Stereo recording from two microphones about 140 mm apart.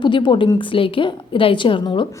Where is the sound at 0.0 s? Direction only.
35° left (ahead or behind).